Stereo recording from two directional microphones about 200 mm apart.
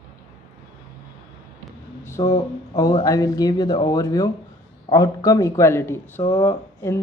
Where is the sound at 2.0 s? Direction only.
15° left (ahead or behind).